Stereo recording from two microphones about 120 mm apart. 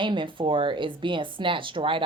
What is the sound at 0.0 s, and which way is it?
Speech, 45° right (ahead or behind).